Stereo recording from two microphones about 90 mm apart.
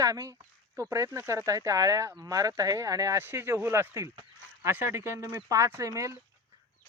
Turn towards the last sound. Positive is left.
turn(degrees=-35)  # may be behind; listen again after turning